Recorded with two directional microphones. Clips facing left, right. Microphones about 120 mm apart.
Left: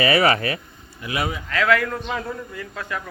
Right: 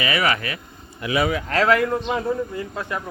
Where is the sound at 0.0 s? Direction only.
35° left (ahead or behind).